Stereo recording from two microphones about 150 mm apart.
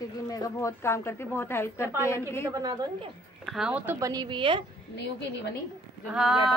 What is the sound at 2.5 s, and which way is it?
Speech, 25° right (ahead or behind).